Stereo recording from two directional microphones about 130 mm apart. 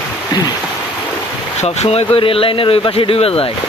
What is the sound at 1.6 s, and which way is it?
Speech, 55° left (ahead or behind).